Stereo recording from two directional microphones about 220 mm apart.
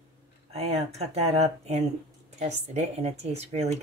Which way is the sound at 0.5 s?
30° right (ahead or behind).